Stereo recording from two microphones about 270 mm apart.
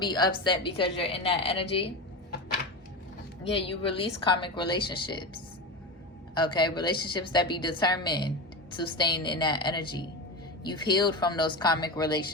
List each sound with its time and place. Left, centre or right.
0.0 s a woman's voice: centre
3.4 s a woman's voice: centre
6.3 s a woman's voice: centre